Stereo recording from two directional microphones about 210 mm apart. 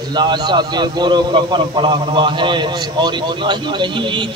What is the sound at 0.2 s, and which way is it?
A man's voice, 20° right (ahead or behind).